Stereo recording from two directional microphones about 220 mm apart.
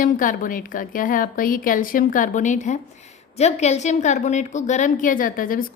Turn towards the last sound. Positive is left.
turn(degrees=40)  # may be behind; listen again after turning